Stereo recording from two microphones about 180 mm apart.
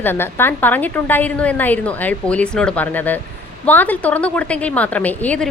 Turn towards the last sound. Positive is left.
turn(degrees=10)  # may be behind; listen again after turning